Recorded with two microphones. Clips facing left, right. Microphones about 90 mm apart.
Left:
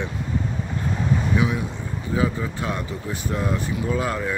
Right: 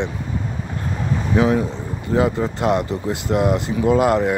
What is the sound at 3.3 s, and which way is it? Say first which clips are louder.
Speech: right 8 dB; 35° right (ahead or behind).